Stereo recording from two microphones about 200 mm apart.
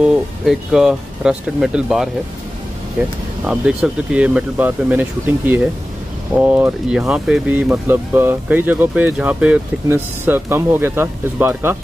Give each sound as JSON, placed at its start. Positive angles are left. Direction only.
{"t": 0.0, "sound": "speech", "side_deg": 0}
{"t": 3.4, "sound": "speech", "side_deg": -5}